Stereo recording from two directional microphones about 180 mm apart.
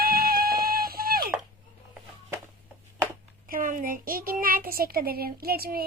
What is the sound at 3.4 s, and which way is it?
Child singing, 50° right (ahead or behind).